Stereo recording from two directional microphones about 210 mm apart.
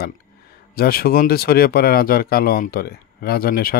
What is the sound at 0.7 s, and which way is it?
Speech, 45° left (ahead or behind).